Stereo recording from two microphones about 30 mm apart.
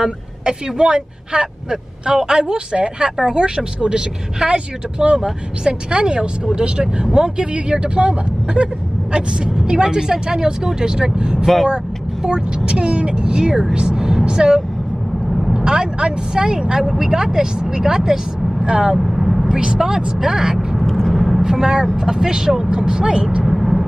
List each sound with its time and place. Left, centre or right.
0.0 s speech: right
13.9 s vehicle: centre
14.2 s vehicle: right
15.5 s speech: right
18.9 s vehicle: centre
19.5 s speech: right
20.9 s vehicle: centre
21.4 s speech: right
23.4 s vehicle: centre